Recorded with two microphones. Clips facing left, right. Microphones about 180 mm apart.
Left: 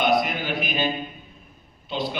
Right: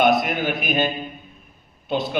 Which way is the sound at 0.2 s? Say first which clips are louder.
Right 2 dB; 50° right (ahead or behind).